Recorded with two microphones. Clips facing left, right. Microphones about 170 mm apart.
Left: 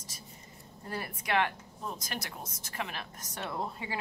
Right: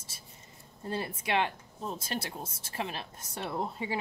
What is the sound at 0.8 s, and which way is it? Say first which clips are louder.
Speech: right 3 dB; 25° right (ahead or behind).